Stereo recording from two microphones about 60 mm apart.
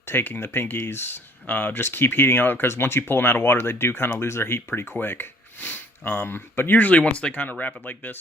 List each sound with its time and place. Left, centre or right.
0.0 s speech: left
6.7 s speech: left